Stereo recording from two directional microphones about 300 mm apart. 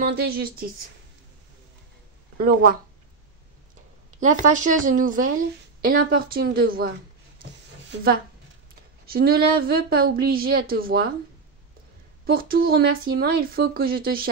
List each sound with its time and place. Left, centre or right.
0.0 s a woman's voice: right
2.3 s a woman's voice: right
4.2 s a woman's voice: right
9.0 s a woman's voice: right
12.3 s a woman's voice: right